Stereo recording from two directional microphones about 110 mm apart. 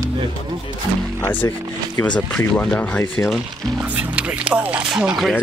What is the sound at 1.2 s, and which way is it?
Speech, 15° left (ahead or behind).